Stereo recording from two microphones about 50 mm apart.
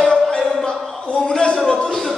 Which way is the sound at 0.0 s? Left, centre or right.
Centre.